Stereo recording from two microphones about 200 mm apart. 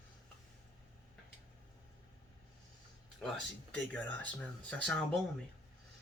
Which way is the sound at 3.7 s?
5° left (ahead or behind).